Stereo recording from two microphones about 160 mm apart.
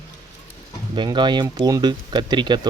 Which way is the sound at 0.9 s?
30° right (ahead or behind).